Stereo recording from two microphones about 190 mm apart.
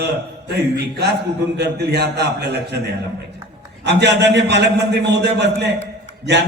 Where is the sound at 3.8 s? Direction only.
65° right (ahead or behind).